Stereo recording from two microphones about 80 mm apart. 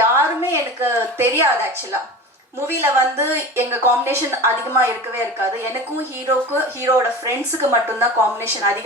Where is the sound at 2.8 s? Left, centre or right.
Right.